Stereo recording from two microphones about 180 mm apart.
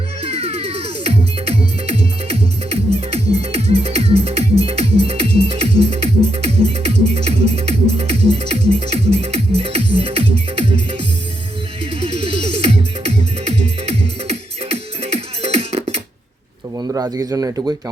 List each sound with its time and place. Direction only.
0.2 s music: 35° right (ahead or behind)
11.9 s music: 30° right (ahead or behind)
13.8 s music: 35° right (ahead or behind)
16.7 s speech: 20° right (ahead or behind)